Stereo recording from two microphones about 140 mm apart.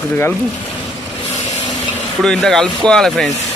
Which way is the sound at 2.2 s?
5° left (ahead or behind).